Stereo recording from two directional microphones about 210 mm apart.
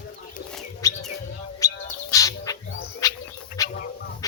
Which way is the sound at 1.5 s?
15° left (ahead or behind).